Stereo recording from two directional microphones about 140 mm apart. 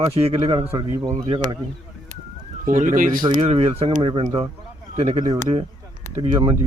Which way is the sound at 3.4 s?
45° right (ahead or behind).